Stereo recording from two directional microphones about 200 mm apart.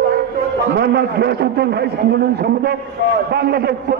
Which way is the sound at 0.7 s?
55° right (ahead or behind).